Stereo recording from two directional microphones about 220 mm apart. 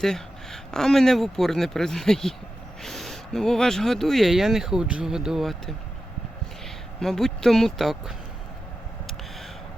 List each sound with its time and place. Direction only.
0.0 s speech: centre (ahead or behind)
7.0 s speech: centre (ahead or behind)